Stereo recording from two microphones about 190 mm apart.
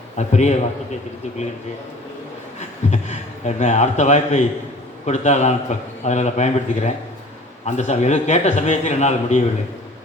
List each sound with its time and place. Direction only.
0.2 s a man's voice: 35° left (ahead or behind)
2.6 s a man's voice: 35° left (ahead or behind)